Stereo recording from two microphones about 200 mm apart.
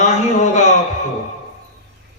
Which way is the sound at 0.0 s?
35° left (ahead or behind).